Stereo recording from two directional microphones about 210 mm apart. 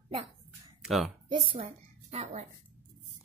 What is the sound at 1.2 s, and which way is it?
A woman's voice, 25° right (ahead or behind).